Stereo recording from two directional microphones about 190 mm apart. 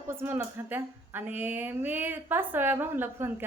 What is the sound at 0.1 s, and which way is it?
Speech, 10° right (ahead or behind).